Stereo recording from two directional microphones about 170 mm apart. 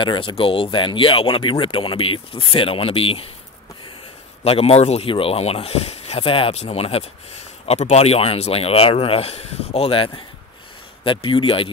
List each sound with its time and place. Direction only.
0.0 s speech: 30° left (ahead or behind)
4.5 s speech: 35° left (ahead or behind)